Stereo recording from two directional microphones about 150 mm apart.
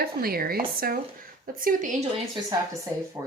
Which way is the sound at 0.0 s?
85° right.